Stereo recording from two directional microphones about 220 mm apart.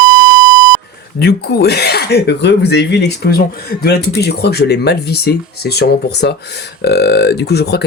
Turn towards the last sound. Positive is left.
turn(degrees=50)  # may be behind; listen again after turning